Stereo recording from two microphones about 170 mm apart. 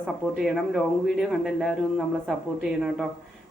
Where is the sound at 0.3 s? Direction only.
5° right (ahead or behind).